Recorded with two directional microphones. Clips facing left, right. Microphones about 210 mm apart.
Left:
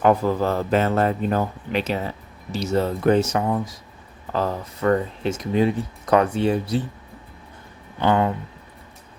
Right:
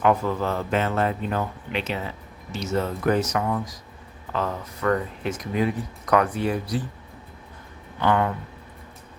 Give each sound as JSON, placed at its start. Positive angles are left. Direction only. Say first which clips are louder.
{"t": 0.0, "sound": "speech", "louder": "left 3 dB", "side_deg": 35}
{"t": 7.9, "sound": "speech", "louder": "left 2 dB", "side_deg": 25}